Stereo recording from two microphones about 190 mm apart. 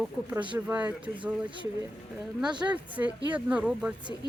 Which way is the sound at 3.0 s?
10° right (ahead or behind).